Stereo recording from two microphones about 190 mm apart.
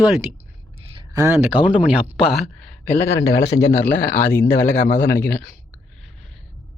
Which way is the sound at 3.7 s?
10° left (ahead or behind).